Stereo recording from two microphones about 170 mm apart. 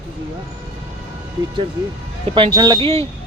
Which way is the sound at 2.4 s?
25° right (ahead or behind).